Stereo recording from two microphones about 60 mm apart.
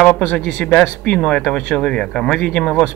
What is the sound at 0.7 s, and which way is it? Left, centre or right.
Speech, left.